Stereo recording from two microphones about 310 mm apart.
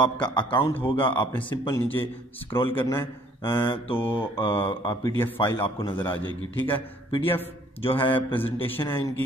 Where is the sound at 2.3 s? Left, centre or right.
Centre.